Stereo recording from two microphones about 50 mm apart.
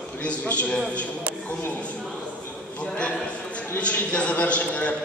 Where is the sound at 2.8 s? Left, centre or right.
Centre.